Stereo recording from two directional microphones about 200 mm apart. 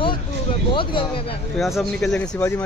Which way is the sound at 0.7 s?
25° left (ahead or behind).